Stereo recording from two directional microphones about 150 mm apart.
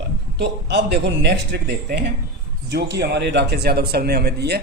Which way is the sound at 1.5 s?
90° right.